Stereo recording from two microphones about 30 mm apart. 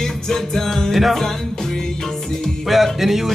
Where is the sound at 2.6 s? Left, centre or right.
Centre.